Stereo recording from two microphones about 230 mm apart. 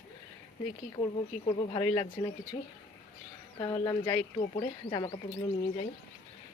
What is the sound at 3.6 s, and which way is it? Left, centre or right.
Speech, centre.